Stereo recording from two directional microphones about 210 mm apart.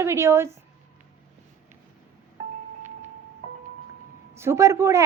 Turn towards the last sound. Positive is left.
turn(degrees=-15)  # may be behind; listen again after turning